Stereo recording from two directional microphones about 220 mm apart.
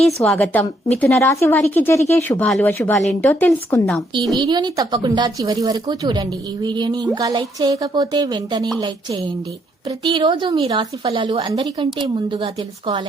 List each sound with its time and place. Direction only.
0.2 s a woman's voice: 5° left (ahead or behind)
4.4 s a woman's voice: 20° right (ahead or behind)